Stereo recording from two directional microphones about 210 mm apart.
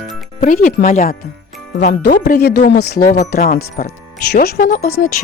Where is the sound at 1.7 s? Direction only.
55° left (ahead or behind).